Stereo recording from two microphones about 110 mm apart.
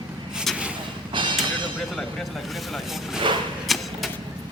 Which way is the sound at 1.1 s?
45° right (ahead or behind).